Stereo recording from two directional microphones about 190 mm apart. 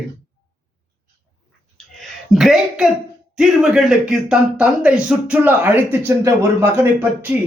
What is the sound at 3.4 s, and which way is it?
Speech, 5° right (ahead or behind).